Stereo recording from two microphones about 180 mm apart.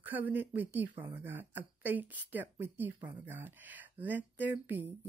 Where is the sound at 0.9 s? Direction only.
30° right (ahead or behind).